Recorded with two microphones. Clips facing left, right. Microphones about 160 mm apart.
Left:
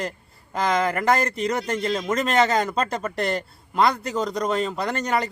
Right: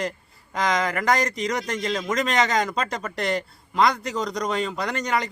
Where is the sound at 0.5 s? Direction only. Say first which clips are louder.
Left 2 dB; 5° left (ahead or behind).